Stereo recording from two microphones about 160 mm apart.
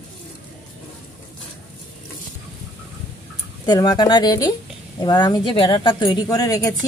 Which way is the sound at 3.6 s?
25° left (ahead or behind).